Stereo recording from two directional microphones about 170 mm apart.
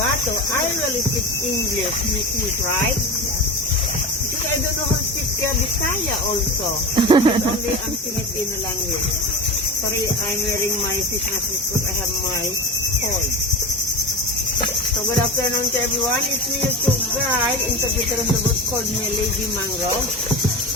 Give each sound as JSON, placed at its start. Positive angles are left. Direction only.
{"t": 6.9, "sound": "speech", "side_deg": -30}